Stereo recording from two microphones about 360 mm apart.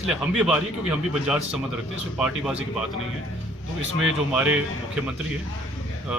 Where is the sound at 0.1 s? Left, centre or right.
Centre.